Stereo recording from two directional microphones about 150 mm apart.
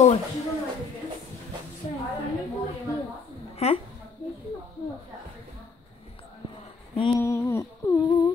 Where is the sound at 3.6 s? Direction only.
45° left (ahead or behind).